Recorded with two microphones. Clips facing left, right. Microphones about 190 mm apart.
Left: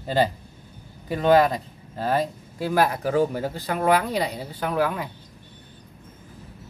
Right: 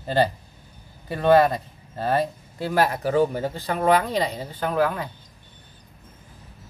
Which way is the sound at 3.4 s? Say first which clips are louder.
Right 1 dB; 10° left (ahead or behind).